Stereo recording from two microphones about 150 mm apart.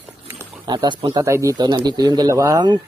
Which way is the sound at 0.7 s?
30° right (ahead or behind).